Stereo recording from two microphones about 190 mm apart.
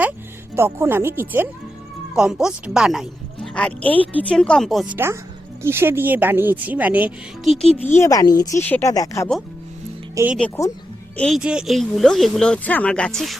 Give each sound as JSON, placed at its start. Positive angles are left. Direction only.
{"t": 0.5, "sound": "speech", "side_deg": -10}
{"t": 5.6, "sound": "speech", "side_deg": -10}
{"t": 10.2, "sound": "speech", "side_deg": -15}
{"t": 10.6, "sound": "speech", "side_deg": 15}
{"t": 11.2, "sound": "speech", "side_deg": 0}